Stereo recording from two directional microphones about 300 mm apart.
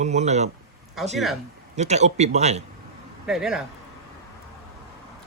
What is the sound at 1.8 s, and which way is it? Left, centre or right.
Speech, right.